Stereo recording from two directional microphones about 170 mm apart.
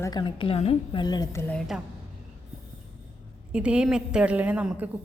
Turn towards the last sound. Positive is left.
turn(degrees=-5)  # may be behind; listen again after turning